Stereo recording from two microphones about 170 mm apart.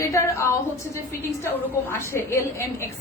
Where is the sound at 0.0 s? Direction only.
15° left (ahead or behind).